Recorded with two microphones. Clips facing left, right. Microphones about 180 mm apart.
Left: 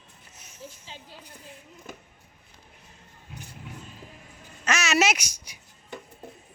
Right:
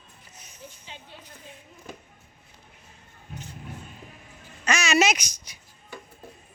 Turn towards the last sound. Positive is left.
turn(degrees=10)  # may be behind; listen again after turning